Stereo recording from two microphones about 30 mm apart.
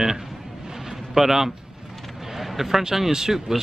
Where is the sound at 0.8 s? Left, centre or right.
Centre.